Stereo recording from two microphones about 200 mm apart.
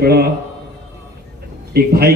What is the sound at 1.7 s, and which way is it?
Speech, 50° right (ahead or behind).